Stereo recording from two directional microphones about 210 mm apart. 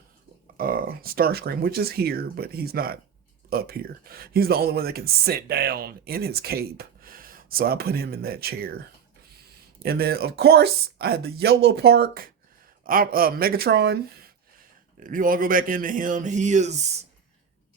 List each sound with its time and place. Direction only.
0.5 s speech: 45° right (ahead or behind)
9.8 s speech: 50° right (ahead or behind)